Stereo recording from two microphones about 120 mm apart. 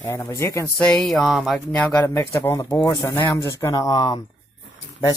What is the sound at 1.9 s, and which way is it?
Speech, 25° left (ahead or behind).